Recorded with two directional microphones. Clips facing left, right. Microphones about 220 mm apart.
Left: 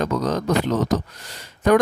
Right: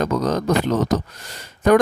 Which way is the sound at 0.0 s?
45° right (ahead or behind).